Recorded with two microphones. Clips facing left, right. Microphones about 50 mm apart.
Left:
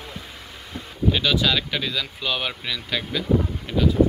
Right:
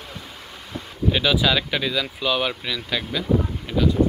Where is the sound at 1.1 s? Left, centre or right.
Centre.